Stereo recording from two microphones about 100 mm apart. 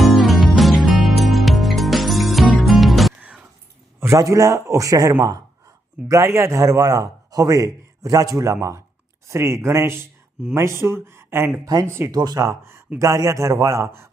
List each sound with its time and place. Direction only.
0.0 s music: centre (ahead or behind)
3.2 s music: 15° right (ahead or behind)
4.0 s a man's voice: 30° right (ahead or behind)
11.6 s a man's voice: 40° right (ahead or behind)
11.9 s speech: 25° right (ahead or behind)
12.1 s a man's voice: 40° right (ahead or behind)